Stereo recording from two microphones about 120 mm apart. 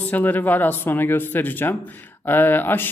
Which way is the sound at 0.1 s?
15° left (ahead or behind).